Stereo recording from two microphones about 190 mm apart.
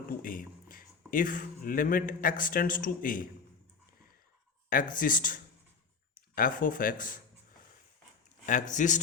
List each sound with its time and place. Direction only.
0.2 s speech: 45° left (ahead or behind)
4.7 s speech: 45° left (ahead or behind)
8.4 s speech: 40° left (ahead or behind)